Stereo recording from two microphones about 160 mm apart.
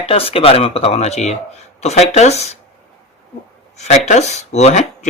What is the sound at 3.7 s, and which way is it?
Speech, 45° left (ahead or behind).